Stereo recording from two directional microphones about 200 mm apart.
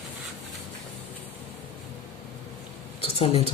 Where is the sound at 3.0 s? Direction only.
30° left (ahead or behind).